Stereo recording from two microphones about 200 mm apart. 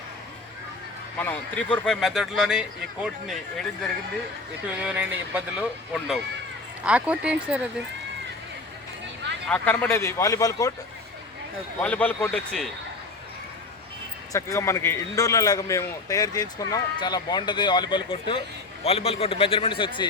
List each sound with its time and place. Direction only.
1.2 s a man's voice: 5° left (ahead or behind)
4.8 s speech: 5° right (ahead or behind)
9.5 s a man's voice: 10° left (ahead or behind)
11.8 s a man's voice: 5° left (ahead or behind)
14.3 s a man's voice: 15° left (ahead or behind)